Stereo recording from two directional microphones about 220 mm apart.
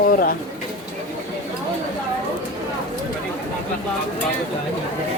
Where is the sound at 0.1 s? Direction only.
40° left (ahead or behind).